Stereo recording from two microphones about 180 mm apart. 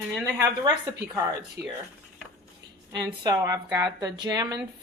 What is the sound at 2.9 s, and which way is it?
A woman's voice, 20° right (ahead or behind).